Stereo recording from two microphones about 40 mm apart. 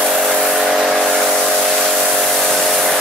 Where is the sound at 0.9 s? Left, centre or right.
Centre.